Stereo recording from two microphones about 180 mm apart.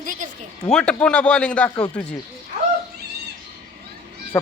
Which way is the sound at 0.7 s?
5° left (ahead or behind).